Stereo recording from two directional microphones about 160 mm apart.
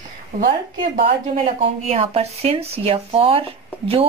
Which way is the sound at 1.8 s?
40° right (ahead or behind).